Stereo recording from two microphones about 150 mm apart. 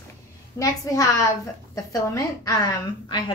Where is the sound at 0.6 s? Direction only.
20° left (ahead or behind).